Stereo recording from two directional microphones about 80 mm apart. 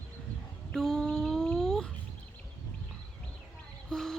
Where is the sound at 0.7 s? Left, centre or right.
Centre.